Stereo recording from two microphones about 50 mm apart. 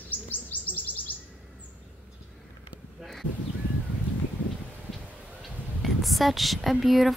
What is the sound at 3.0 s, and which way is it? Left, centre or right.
Speech, centre.